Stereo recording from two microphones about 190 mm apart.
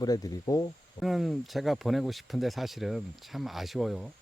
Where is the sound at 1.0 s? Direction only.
Centre (ahead or behind).